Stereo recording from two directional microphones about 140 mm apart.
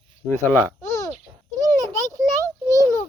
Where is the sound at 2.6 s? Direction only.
25° right (ahead or behind).